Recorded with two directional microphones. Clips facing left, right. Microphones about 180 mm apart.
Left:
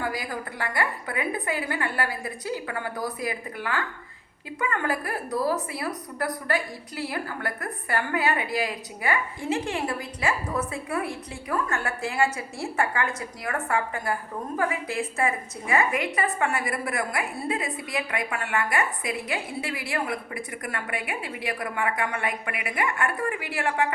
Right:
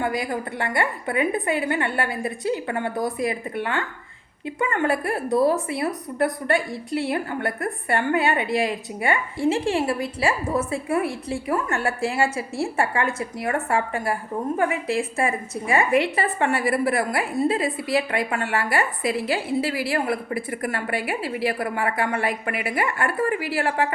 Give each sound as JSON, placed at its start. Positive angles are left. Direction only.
{"t": 0.0, "sound": "a woman's voice", "side_deg": -25}